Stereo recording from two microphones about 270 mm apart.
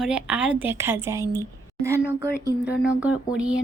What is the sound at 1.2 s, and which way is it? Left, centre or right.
Speech, centre.